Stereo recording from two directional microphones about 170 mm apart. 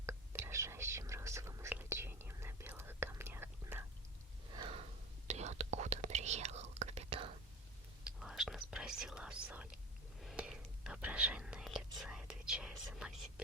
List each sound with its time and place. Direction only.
0.0 s whispering: 15° right (ahead or behind)
4.5 s a sound: 35° right (ahead or behind)
5.3 s whispering: 40° right (ahead or behind)
8.0 s speech: 5° right (ahead or behind)
10.2 s whispering: centre (ahead or behind)